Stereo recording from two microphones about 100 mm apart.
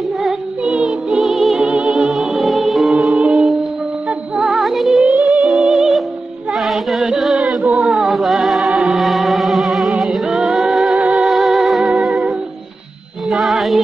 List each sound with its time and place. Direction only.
0.2 s music: 10° right (ahead or behind)
5.0 s music: 15° right (ahead or behind)
9.0 s music: centre (ahead or behind)
13.3 s music: centre (ahead or behind)